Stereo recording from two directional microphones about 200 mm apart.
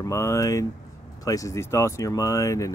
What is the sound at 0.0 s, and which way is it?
Speech, 15° left (ahead or behind).